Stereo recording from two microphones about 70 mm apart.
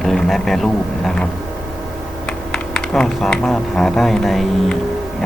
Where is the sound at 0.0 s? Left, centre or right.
Centre.